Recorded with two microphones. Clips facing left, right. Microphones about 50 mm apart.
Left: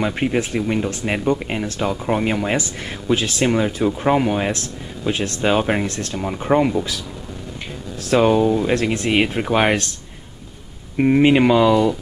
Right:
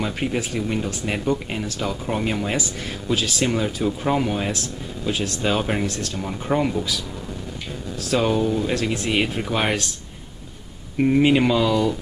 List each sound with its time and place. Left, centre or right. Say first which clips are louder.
0.0 s speech: left 4 dB; left
8.1 s speech: left 5 dB; centre
11.0 s speech: left 3 dB; left